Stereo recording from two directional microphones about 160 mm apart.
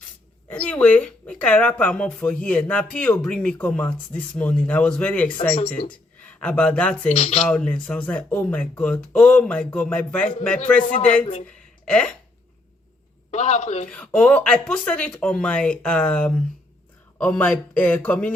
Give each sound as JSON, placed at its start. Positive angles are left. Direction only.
{"t": 0.4, "sound": "speech", "side_deg": 10}
{"t": 5.8, "sound": "a woman's voice", "side_deg": 45}
{"t": 6.2, "sound": "speech", "side_deg": 10}
{"t": 10.8, "sound": "a woman's voice", "side_deg": 55}
{"t": 11.4, "sound": "a sound", "side_deg": 5}
{"t": 13.3, "sound": "a woman's voice", "side_deg": 45}
{"t": 13.9, "sound": "speech", "side_deg": 5}